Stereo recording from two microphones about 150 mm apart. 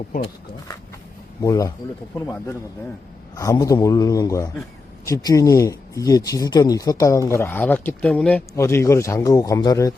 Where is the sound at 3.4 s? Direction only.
20° left (ahead or behind).